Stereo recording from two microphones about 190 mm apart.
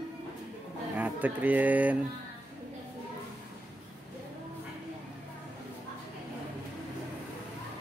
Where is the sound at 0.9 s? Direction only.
10° right (ahead or behind).